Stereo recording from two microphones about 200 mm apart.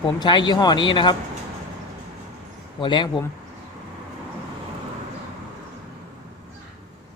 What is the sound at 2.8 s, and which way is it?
Speech, 25° left (ahead or behind).